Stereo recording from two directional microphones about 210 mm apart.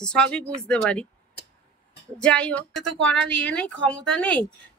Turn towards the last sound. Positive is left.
turn(degrees=5)  # may be behind; listen again after turning